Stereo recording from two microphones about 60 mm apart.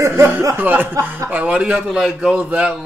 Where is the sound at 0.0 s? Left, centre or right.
Right.